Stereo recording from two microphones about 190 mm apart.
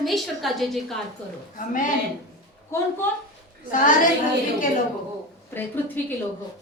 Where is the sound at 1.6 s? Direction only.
45° left (ahead or behind).